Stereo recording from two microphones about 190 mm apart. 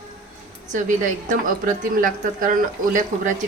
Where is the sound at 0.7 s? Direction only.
40° right (ahead or behind).